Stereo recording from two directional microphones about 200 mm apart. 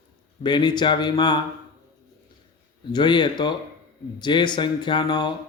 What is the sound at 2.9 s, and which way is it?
Speech, 20° left (ahead or behind).